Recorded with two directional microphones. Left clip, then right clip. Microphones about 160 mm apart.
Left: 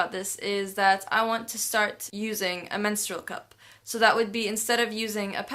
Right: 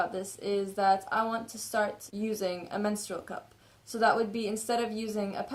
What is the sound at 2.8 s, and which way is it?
Speech, 35° left (ahead or behind).